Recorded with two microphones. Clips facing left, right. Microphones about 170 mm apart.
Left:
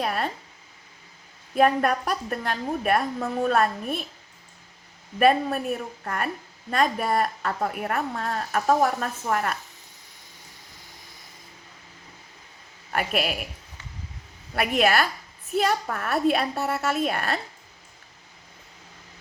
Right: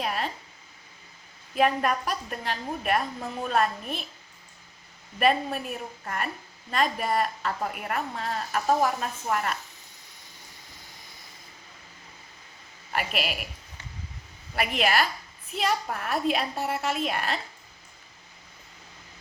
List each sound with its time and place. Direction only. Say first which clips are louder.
0.0 s speech: left 3 dB; 50° left (ahead or behind)
1.5 s a woman's voice: left 3 dB; 45° left (ahead or behind)
5.2 s a woman's voice: left 4 dB; 45° left (ahead or behind)
12.9 s a woman's voice: left 4 dB; 45° left (ahead or behind)
14.5 s a woman's voice: left 4 dB; 45° left (ahead or behind)